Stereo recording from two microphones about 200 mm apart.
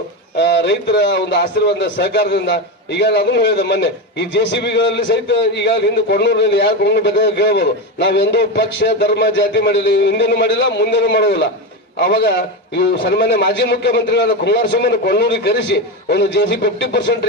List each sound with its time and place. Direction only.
0.3 s a man's voice: 60° left (ahead or behind)